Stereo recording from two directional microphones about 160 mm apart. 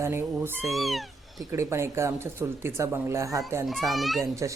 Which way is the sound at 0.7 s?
Centre (ahead or behind).